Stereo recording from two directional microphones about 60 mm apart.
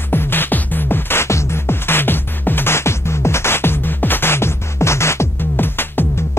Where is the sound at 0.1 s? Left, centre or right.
Left.